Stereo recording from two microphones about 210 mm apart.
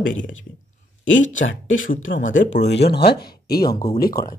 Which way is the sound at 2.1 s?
45° left (ahead or behind).